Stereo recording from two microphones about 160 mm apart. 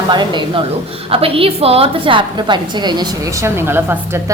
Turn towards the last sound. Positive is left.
turn(degrees=-15)  # may be behind; listen again after turning